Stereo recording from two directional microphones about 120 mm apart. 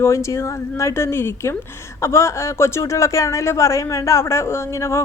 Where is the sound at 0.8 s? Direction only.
25° left (ahead or behind).